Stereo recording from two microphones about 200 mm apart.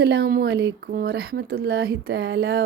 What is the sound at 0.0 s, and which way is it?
A woman's voice, 55° right (ahead or behind).